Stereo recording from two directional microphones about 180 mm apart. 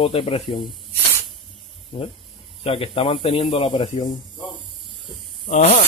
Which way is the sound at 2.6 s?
30° left (ahead or behind).